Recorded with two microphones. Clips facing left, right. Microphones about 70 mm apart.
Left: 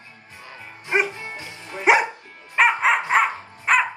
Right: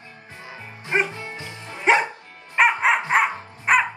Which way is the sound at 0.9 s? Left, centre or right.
Centre.